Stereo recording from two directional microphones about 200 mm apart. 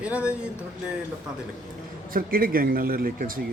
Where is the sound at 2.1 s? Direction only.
45° right (ahead or behind).